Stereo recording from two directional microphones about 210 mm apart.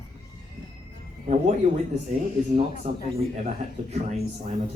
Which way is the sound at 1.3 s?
35° right (ahead or behind).